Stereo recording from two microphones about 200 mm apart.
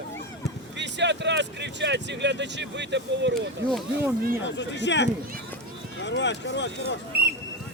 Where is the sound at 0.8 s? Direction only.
60° right (ahead or behind).